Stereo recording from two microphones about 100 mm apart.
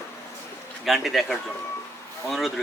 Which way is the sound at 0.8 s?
Centre (ahead or behind).